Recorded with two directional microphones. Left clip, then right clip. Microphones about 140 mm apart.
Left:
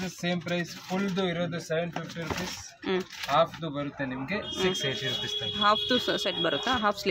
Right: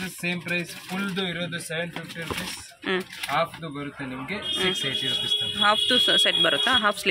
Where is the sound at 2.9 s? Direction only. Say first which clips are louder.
Right 2 dB; 5° left (ahead or behind).